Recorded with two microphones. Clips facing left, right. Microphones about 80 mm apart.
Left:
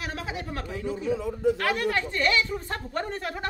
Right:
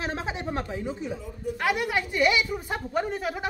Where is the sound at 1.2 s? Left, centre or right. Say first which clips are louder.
Left 9 dB; left.